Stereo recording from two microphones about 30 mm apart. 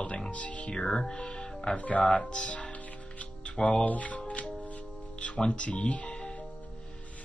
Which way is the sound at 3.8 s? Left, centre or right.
Left.